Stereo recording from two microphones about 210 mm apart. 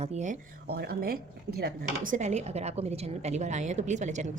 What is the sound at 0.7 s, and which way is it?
A woman's voice, 45° right (ahead or behind).